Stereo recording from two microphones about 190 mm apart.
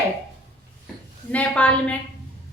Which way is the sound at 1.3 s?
5° left (ahead or behind).